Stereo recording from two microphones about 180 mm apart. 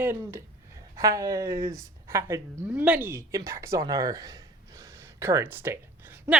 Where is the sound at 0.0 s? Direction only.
15° right (ahead or behind).